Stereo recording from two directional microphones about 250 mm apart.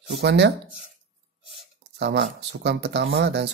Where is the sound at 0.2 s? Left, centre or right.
Right.